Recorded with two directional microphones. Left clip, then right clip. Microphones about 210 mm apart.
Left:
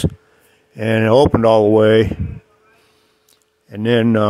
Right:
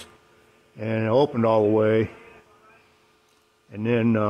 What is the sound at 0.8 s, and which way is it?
Speech, 40° left (ahead or behind).